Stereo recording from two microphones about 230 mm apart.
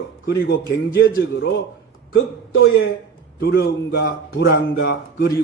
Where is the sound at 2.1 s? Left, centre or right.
Left.